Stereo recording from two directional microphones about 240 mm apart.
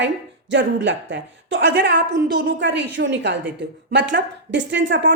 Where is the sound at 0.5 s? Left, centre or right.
Right.